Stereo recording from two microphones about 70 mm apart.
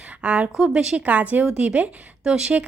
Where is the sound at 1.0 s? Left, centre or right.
Right.